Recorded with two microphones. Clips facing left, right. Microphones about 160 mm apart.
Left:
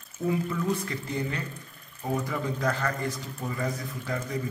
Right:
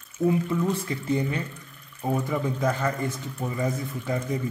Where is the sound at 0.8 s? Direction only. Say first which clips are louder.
Right 5 dB; 20° right (ahead or behind).